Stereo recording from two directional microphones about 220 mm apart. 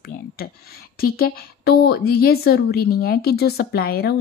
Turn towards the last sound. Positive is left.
turn(degrees=45)  # may be behind; listen again after turning